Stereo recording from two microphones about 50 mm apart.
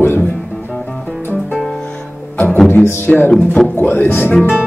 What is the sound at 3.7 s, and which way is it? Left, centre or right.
Speech, left.